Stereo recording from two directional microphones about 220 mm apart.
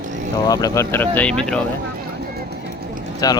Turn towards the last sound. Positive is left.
turn(degrees=15)  # may be behind; listen again after turning